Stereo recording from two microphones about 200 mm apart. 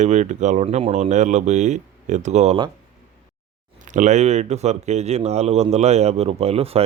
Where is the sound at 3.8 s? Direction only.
40° right (ahead or behind).